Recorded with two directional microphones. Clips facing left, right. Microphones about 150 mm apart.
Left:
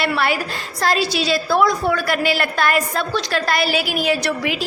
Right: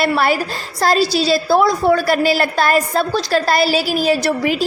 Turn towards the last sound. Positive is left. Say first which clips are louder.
# right 4 dB
turn(degrees=-35)  # may be behind; listen again after turning